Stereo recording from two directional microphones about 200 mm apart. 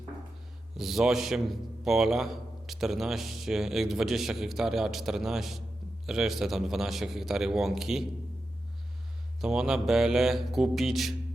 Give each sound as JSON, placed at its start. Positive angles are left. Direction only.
{"t": 0.8, "sound": "a man's voice", "side_deg": 0}
{"t": 9.4, "sound": "a man's voice", "side_deg": -5}